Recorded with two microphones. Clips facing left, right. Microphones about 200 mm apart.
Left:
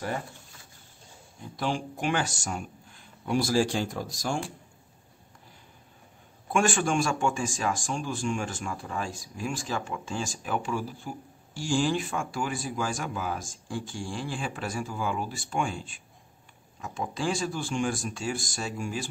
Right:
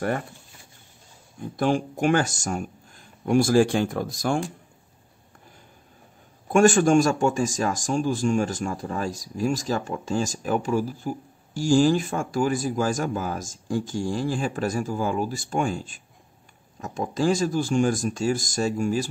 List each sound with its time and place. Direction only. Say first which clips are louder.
1.6 s speech: right 7 dB; 50° right (ahead or behind)
6.5 s speech: right 9 dB; 40° right (ahead or behind)